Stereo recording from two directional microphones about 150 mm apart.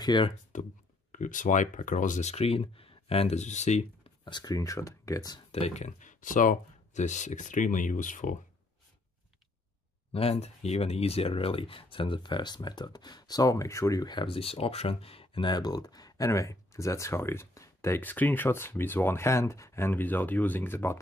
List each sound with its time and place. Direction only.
0.0 s speech: 30° left (ahead or behind)
0.5 s speech: 55° left (ahead or behind)
4.2 s speech: 30° left (ahead or behind)
5.5 s speech: 45° left (ahead or behind)
10.1 s speech: 40° left (ahead or behind); by 21.0 s 15° left (ahead or behind)